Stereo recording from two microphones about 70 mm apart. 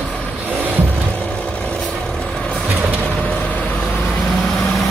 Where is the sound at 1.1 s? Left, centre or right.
Centre.